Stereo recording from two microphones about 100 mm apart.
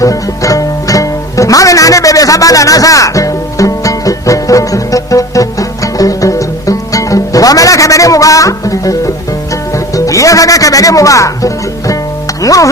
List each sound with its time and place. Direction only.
0.0 s music: 35° left (ahead or behind)
12.4 s speech: 35° left (ahead or behind)